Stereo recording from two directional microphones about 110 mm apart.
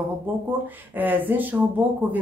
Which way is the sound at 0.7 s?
15° right (ahead or behind).